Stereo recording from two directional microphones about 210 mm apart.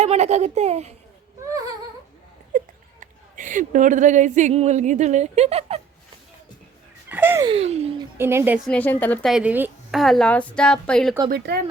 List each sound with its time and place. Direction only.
0.0 s a child's voice: 30° right (ahead or behind)
1.5 s a sound: 15° right (ahead or behind)
2.5 s speech: 40° right (ahead or behind)
7.1 s a sound: 10° right (ahead or behind)
7.4 s speech: 30° right (ahead or behind)
8.2 s a woman's voice: 10° right (ahead or behind); by 9.3 s 10° left (ahead or behind)
9.3 s a woman's voice: 5° right (ahead or behind)
11.3 s speech: 50° right (ahead or behind)